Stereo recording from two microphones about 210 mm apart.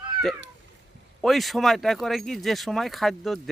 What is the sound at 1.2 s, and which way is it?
Speech, centre (ahead or behind).